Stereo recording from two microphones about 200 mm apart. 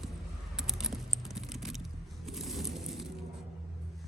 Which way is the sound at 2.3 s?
Centre (ahead or behind).